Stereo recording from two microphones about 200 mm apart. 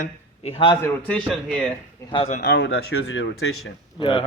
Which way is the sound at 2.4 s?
65° left (ahead or behind).